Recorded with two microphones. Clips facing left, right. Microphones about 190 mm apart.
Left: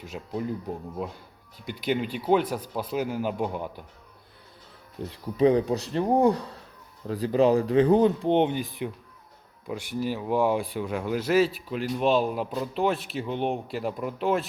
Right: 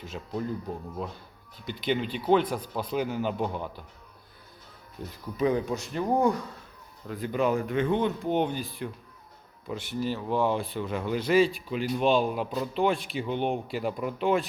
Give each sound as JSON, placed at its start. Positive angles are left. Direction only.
{"t": 0.0, "sound": "speech", "side_deg": 10}
{"t": 5.0, "sound": "speech", "side_deg": 30}